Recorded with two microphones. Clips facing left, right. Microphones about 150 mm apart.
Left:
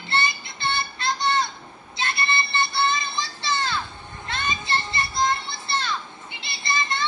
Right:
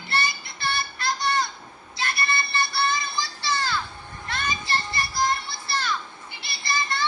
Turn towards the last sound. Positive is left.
turn(degrees=20)  # may be behind; listen again after turning